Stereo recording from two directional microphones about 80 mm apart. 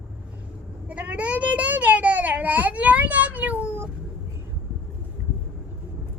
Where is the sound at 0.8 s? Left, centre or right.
Centre.